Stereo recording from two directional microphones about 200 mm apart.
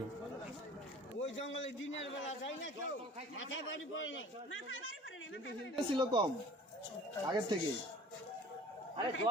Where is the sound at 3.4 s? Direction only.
75° left (ahead or behind).